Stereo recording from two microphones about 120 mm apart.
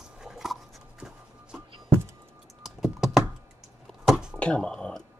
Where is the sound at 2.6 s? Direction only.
5° right (ahead or behind).